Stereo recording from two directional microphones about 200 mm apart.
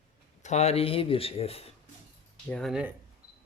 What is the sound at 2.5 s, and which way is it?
Speech, centre (ahead or behind).